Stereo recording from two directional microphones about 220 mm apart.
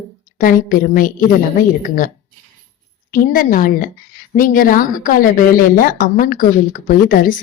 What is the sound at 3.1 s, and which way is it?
A woman's voice, 40° left (ahead or behind).